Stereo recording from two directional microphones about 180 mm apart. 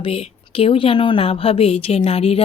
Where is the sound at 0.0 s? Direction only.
30° left (ahead or behind).